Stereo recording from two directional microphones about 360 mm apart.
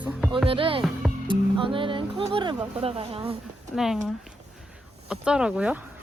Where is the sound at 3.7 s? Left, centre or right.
Centre.